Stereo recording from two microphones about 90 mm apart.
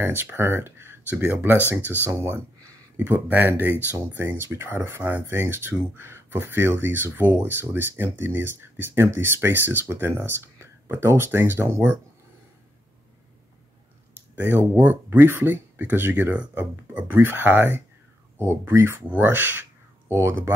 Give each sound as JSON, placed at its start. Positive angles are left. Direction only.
{"t": 0.0, "sound": "speech", "side_deg": -25}
{"t": 14.3, "sound": "speech", "side_deg": -20}